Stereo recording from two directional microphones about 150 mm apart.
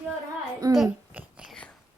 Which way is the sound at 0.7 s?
5° right (ahead or behind).